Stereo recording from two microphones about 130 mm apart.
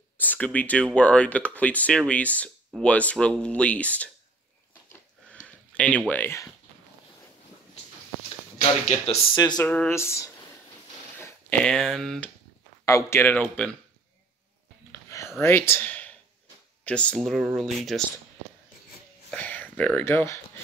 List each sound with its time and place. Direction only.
0.2 s speech: 10° left (ahead or behind)
5.3 s a sound: 10° left (ahead or behind)
8.5 s speech: 55° left (ahead or behind)
9.3 s speech: 35° left (ahead or behind)
9.6 s speech: 10° left (ahead or behind)
9.9 s speech: 20° left (ahead or behind)
11.1 s a sound: 15° left (ahead or behind)
11.6 s speech: 5° left (ahead or behind)
12.8 s speech: 20° left (ahead or behind)
14.9 s a sound: 25° left (ahead or behind)
15.4 s speech: 20° left (ahead or behind); by 18.0 s centre (ahead or behind)
19.3 s speech: 10° left (ahead or behind)